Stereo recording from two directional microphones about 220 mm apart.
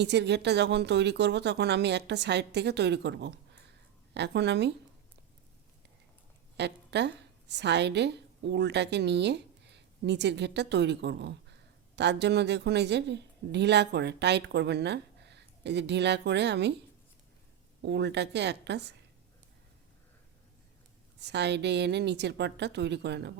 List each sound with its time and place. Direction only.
0.0 s a woman's voice: 50° right (ahead or behind)
6.6 s a woman's voice: 50° right (ahead or behind)
17.8 s a woman's voice: 50° right (ahead or behind)
21.2 s a woman's voice: 50° right (ahead or behind)